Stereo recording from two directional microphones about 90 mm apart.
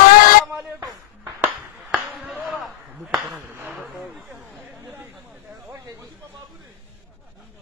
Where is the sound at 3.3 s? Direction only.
25° right (ahead or behind).